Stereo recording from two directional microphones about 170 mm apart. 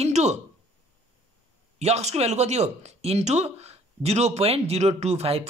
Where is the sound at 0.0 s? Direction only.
40° right (ahead or behind).